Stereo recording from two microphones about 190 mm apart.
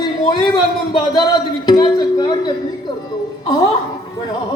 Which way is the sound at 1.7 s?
20° left (ahead or behind).